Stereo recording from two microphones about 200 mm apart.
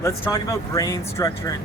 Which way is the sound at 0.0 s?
15° left (ahead or behind).